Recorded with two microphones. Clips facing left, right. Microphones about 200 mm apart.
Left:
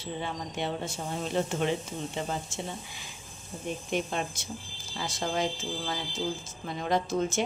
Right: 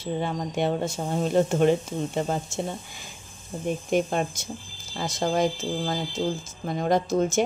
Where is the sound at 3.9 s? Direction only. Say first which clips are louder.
Right 7 dB; 45° right (ahead or behind).